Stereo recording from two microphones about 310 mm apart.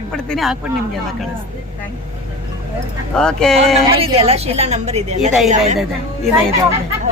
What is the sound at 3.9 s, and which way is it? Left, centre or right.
A woman's voice, centre.